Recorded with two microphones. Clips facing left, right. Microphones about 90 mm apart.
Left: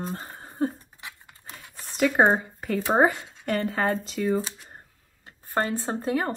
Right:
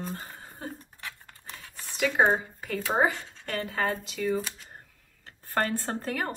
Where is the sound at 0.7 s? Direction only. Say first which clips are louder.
Right 2 dB; 15° left (ahead or behind).